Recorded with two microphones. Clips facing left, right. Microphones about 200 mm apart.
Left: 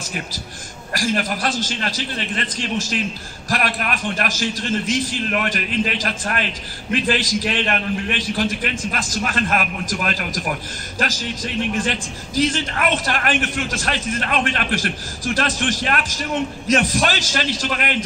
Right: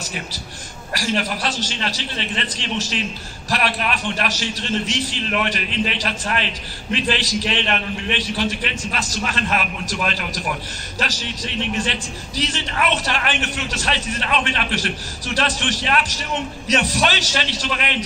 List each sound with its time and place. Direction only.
0.9 s a man's voice: 45° left (ahead or behind)